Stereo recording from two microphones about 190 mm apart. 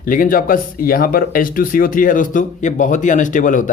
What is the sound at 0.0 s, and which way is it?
Speech, 45° left (ahead or behind).